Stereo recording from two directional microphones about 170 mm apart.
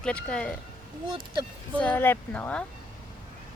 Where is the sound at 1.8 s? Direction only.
10° left (ahead or behind).